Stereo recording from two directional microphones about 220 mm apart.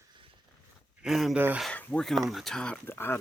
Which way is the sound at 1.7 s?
5° left (ahead or behind).